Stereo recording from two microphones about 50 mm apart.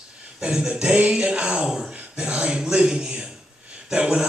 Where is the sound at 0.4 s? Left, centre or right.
Centre.